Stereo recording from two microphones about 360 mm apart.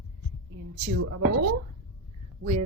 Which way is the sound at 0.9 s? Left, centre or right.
Right.